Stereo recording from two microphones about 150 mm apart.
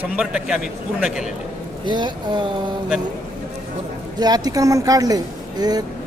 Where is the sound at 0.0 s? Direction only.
5° right (ahead or behind).